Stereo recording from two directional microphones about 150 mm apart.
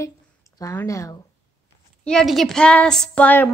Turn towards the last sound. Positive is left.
turn(degrees=10)  # may be behind; listen again after turning